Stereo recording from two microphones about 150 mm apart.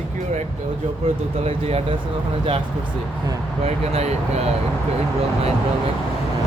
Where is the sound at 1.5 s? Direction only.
40° right (ahead or behind).